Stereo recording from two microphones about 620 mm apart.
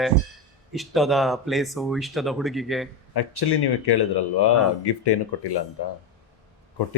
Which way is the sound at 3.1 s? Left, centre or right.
Left.